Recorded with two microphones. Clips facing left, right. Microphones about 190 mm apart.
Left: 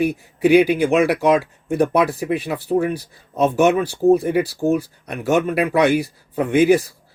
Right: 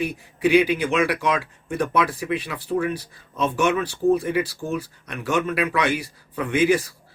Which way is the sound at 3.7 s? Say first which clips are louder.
Left 5 dB; 40° left (ahead or behind).